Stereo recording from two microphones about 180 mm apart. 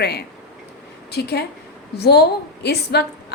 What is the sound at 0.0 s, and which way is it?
A woman's voice, 65° left (ahead or behind).